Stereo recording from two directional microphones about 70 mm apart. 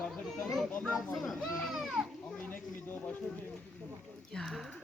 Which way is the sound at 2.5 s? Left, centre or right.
Left.